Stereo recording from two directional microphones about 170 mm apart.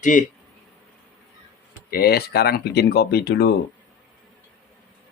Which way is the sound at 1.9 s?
65° left (ahead or behind).